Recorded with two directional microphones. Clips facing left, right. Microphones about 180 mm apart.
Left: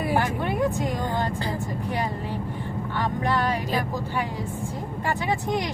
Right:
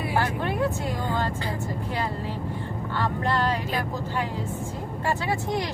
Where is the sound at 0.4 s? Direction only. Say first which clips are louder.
Left 2 dB; 15° left (ahead or behind).